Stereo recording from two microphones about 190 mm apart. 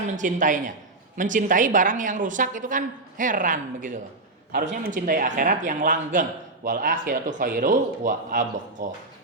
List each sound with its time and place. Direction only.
0.0 s a woman's voice: 45° right (ahead or behind)